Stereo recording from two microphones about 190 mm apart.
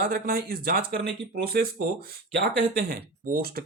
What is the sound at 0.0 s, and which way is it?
Speech, 55° right (ahead or behind).